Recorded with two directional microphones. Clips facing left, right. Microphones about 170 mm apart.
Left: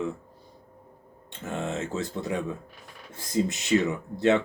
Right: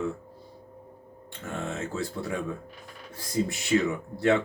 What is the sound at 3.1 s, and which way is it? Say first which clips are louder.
Speech: left 2 dB; 20° left (ahead or behind).